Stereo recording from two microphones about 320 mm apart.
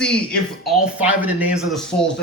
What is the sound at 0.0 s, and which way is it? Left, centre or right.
Speech, centre.